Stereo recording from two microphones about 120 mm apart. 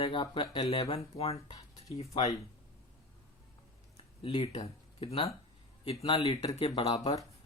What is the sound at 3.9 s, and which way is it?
Speech, 50° left (ahead or behind).